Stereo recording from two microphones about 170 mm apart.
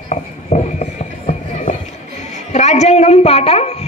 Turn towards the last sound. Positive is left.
turn(degrees=35)  # may be behind; listen again after turning